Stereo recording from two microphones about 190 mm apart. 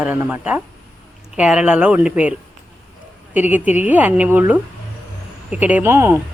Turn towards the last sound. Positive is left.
turn(degrees=-10)  # may be behind; listen again after turning